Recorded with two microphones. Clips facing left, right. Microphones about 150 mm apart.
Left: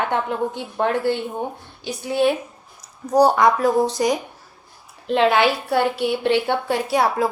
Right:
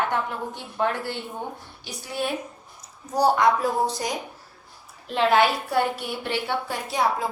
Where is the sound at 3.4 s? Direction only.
90° left.